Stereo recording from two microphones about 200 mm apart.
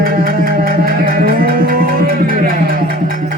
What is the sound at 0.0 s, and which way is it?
Music, 45° right (ahead or behind).